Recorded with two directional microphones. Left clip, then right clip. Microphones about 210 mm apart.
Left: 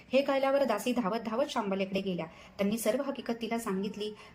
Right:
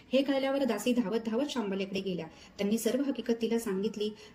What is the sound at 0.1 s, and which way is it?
A woman's voice, centre (ahead or behind).